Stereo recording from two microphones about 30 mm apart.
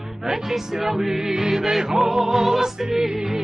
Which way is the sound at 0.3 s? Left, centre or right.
Centre.